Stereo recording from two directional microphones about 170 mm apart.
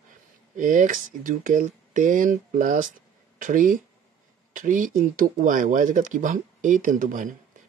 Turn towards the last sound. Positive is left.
turn(degrees=-50)  # may be behind; listen again after turning